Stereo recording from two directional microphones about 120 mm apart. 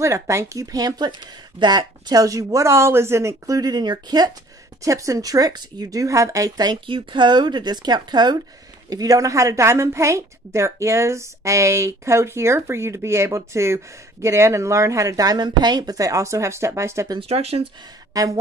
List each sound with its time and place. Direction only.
0.0 s a woman's voice: 25° right (ahead or behind)
17.2 s speech: 60° right (ahead or behind)
18.1 s speech: 30° right (ahead or behind)